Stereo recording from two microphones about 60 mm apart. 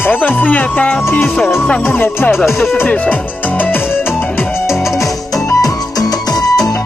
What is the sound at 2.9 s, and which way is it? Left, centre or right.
Music, left.